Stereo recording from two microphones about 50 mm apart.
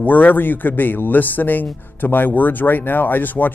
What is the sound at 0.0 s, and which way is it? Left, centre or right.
A man's voice, left.